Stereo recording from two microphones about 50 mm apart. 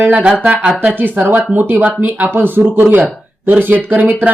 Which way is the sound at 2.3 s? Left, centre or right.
Right.